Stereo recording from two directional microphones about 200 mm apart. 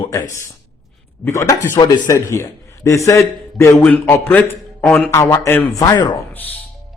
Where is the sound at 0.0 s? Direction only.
20° left (ahead or behind); by 5.1 s 5° left (ahead or behind).